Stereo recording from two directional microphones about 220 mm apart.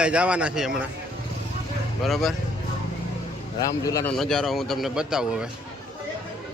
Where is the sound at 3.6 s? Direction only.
15° left (ahead or behind).